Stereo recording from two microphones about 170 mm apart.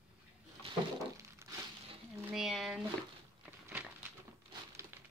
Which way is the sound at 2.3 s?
Centre (ahead or behind).